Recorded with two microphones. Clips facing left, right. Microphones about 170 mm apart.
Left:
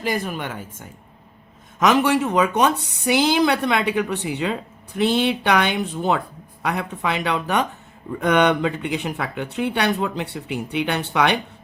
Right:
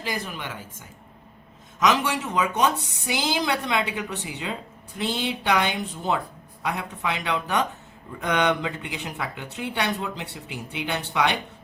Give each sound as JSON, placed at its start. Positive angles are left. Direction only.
{"t": 0.0, "sound": "a woman's voice", "side_deg": 55}